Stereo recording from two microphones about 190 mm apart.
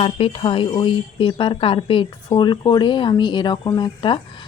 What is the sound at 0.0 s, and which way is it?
Speech, 30° left (ahead or behind).